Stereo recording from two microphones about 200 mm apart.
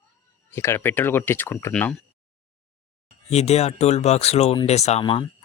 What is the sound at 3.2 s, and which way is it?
Speech, 30° left (ahead or behind).